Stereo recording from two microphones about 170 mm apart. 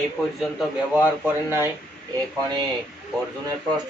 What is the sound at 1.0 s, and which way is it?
Speech, 10° right (ahead or behind).